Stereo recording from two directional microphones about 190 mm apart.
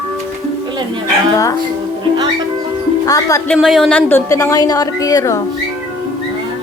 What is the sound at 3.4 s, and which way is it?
Speech, centre (ahead or behind).